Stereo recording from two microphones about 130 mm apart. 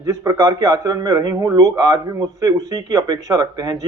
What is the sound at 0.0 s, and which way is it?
Speech, 25° right (ahead or behind).